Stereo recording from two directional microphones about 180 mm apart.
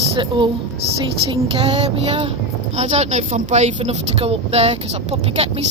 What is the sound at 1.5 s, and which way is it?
Speech, 30° right (ahead or behind).